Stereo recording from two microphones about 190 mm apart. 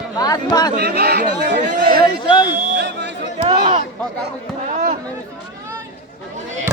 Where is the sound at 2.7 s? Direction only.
60° right (ahead or behind).